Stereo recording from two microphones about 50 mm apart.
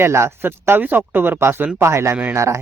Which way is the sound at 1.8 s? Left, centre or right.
Right.